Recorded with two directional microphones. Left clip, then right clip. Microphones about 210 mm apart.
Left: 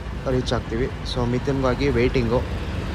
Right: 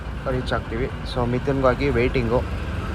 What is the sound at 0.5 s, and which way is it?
Speech, 10° left (ahead or behind).